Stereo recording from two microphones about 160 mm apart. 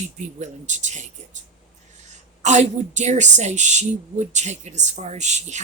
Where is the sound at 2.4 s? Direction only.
45° right (ahead or behind).